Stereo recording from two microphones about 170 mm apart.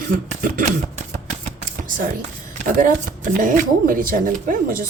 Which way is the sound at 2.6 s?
50° right (ahead or behind).